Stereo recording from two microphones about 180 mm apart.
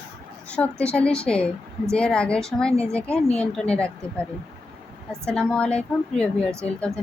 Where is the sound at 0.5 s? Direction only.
5° left (ahead or behind).